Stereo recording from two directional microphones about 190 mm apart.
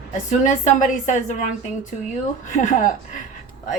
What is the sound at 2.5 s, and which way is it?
Speech, 40° left (ahead or behind).